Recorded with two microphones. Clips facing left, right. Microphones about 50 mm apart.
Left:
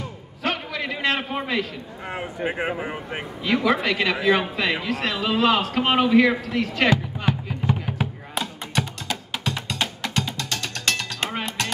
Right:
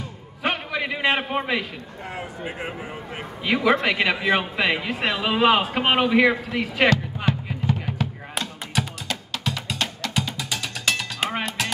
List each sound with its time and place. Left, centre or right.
0.4 s a sound: centre
2.1 s speech: left
3.4 s a man's voice: centre
7.3 s music: centre
7.6 s a sound: centre
8.4 s music: centre